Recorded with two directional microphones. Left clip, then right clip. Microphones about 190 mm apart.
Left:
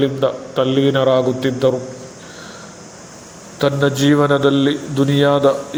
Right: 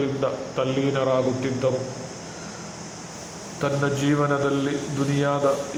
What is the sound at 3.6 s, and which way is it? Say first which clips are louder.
A man's voice: left 8 dB; 35° left (ahead or behind).